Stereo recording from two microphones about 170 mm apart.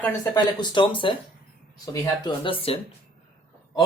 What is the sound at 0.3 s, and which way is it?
Speech, 25° left (ahead or behind).